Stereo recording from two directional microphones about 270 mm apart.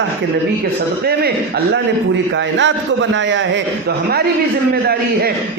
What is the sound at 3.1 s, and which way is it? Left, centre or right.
Speech, right.